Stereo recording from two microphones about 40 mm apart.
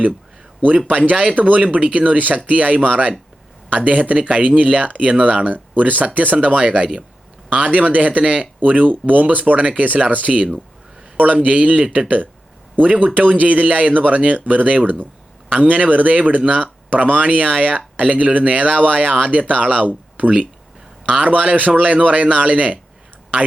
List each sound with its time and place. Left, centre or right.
1.1 s speech: right
1.4 s speech: right